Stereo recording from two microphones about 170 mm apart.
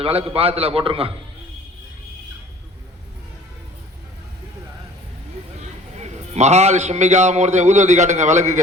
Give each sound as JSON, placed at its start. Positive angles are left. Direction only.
{"t": 0.0, "sound": "a man's voice", "side_deg": -35}
{"t": 6.0, "sound": "a man's voice", "side_deg": -40}